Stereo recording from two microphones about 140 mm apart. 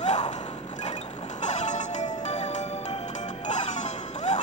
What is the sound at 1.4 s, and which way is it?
Music, 55° left (ahead or behind).